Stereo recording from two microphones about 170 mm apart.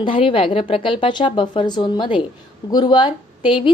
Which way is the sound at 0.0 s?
30° left (ahead or behind).